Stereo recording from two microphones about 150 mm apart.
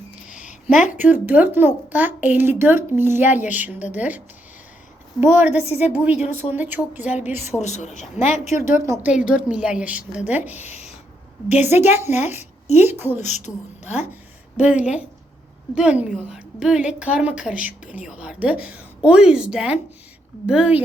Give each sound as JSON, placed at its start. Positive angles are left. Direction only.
{"t": 0.3, "sound": "a sound", "side_deg": -5}
{"t": 0.7, "sound": "speech", "side_deg": 55}
{"t": 0.9, "sound": "a woman's voice", "side_deg": -10}
{"t": 5.2, "sound": "a woman's voice", "side_deg": -10}
{"t": 7.6, "sound": "speech", "side_deg": 50}
{"t": 8.6, "sound": "a woman's voice", "side_deg": -15}
{"t": 10.7, "sound": "a sound", "side_deg": 45}
{"t": 11.6, "sound": "a woman's voice", "side_deg": -15}
{"t": 13.2, "sound": "speech", "side_deg": 50}
{"t": 14.5, "sound": "a woman's voice", "side_deg": -10}